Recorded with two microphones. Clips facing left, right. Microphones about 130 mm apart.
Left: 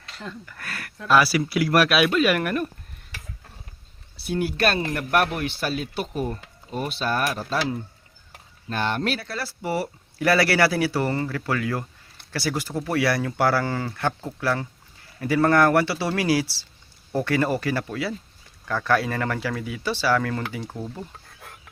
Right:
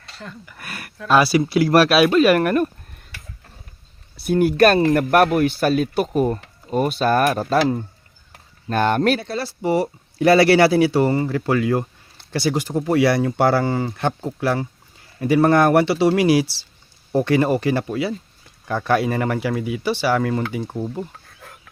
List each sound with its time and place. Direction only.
0.4 s speech: 15° right (ahead or behind); by 2.6 s 45° right (ahead or behind)
4.2 s speech: 50° right (ahead or behind)
9.2 s speech: 20° right (ahead or behind)